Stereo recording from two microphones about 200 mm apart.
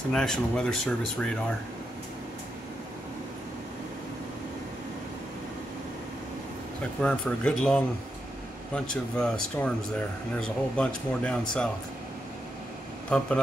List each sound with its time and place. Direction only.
0.1 s speech: 5° left (ahead or behind)
7.0 s speech: 5° left (ahead or behind)
13.1 s speech: 5° left (ahead or behind)